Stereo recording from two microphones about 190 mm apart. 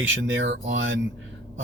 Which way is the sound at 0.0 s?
80° right.